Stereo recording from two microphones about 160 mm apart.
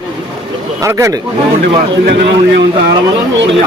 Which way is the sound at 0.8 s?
15° right (ahead or behind).